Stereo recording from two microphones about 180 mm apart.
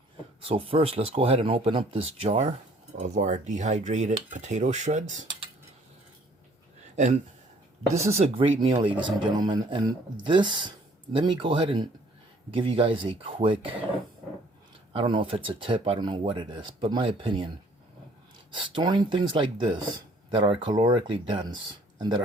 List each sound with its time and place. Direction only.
0.4 s speech: 30° right (ahead or behind)
6.9 s speech: 40° right (ahead or behind)
14.9 s speech: 30° right (ahead or behind)
18.5 s speech: 30° right (ahead or behind)